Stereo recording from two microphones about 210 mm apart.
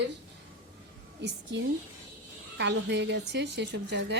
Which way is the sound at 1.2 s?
55° right (ahead or behind).